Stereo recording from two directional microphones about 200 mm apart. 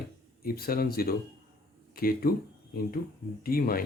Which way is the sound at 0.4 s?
50° left (ahead or behind).